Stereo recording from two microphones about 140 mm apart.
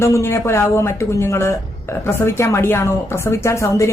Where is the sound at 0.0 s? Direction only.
20° left (ahead or behind).